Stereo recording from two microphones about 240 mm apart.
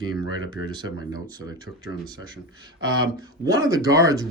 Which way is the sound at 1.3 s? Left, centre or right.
Centre.